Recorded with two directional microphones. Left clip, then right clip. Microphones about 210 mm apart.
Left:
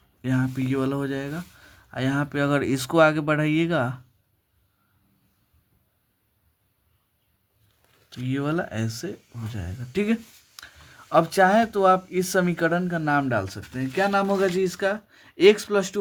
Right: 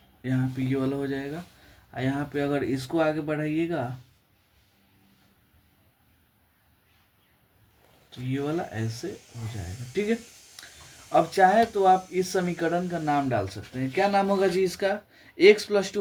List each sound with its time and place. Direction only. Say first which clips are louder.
0.2 s speech: left 3 dB; 30° left (ahead or behind)
8.3 s speech: left 3 dB; 50° left (ahead or behind)
13.9 s speech: left 1 dB; 20° left (ahead or behind)